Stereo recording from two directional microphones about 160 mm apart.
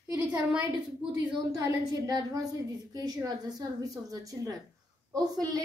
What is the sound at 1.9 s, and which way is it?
A woman's voice, 25° right (ahead or behind).